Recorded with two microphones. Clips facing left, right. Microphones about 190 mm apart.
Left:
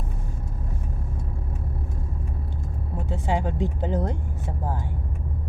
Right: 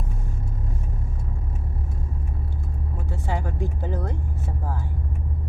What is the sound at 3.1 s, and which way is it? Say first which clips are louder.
Speech: left 4 dB; 20° left (ahead or behind).